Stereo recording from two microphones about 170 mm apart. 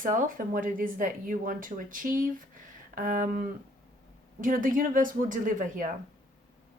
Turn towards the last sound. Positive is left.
turn(degrees=-50)  # may be behind; listen again after turning